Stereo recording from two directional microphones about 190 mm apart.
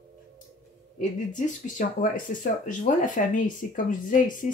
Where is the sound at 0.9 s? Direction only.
45° left (ahead or behind).